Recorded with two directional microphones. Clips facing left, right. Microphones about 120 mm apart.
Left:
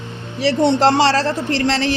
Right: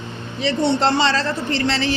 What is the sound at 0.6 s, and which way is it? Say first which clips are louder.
Speech: left 4 dB; 80° left.